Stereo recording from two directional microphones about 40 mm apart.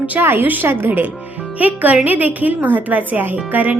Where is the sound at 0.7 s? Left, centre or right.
Right.